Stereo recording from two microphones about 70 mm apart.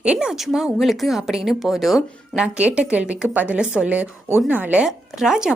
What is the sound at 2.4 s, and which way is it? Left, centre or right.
A woman's voice, centre.